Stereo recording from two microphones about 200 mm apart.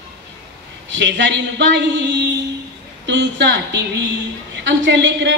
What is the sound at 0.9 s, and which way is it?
Speech, 60° right (ahead or behind).